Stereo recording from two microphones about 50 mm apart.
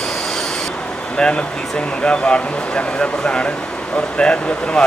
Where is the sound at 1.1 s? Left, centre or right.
Centre.